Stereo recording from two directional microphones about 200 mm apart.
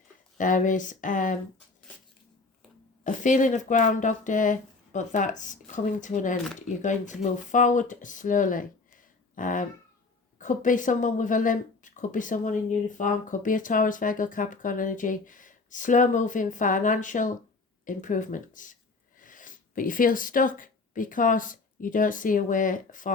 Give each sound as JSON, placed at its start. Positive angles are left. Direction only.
{"t": 0.3, "sound": "a woman's voice", "side_deg": 40}
{"t": 3.0, "sound": "a woman's voice", "side_deg": 40}